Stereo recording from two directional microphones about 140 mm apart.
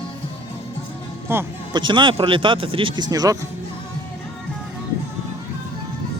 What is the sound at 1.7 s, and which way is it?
Speech, 35° right (ahead or behind).